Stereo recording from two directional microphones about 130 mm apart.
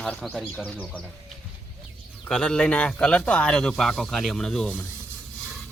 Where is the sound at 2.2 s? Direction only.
5° left (ahead or behind).